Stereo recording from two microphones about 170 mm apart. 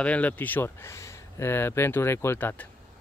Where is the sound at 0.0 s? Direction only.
10° left (ahead or behind).